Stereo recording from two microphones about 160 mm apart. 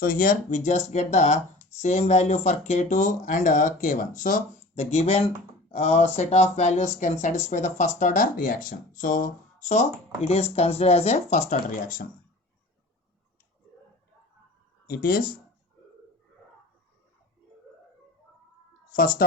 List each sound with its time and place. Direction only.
0.0 s speech: 65° left (ahead or behind)
14.8 s speech: 75° left (ahead or behind)